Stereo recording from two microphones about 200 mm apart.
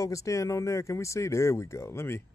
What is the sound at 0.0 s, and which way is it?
Speech, 15° left (ahead or behind).